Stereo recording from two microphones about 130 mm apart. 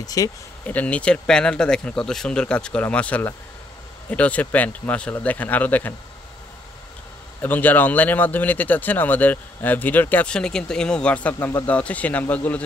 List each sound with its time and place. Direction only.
0.0 s speech: 25° left (ahead or behind)
0.7 s speech: 10° left (ahead or behind)
7.4 s speech: 15° left (ahead or behind)